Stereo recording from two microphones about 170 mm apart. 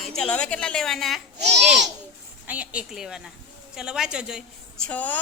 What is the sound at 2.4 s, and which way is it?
A woman's voice, 10° right (ahead or behind).